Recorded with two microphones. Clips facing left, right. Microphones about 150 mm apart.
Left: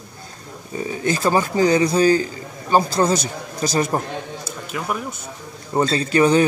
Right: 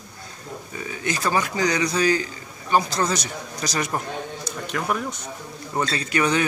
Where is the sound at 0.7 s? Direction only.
30° left (ahead or behind).